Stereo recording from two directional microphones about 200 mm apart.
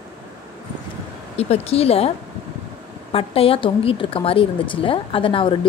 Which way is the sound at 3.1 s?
30° left (ahead or behind).